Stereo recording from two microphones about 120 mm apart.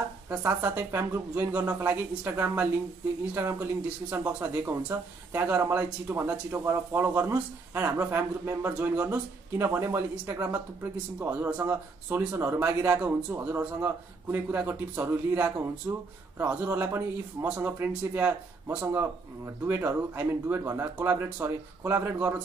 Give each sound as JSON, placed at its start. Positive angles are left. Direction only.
{"t": 0.3, "sound": "a man's voice", "side_deg": -15}
{"t": 4.1, "sound": "a man's voice", "side_deg": -15}